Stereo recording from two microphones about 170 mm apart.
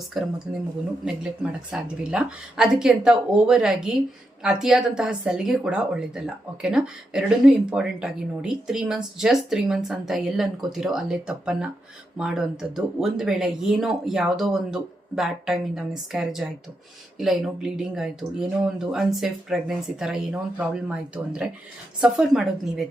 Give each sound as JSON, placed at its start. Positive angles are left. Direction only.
{"t": 0.1, "sound": "speech", "side_deg": 0}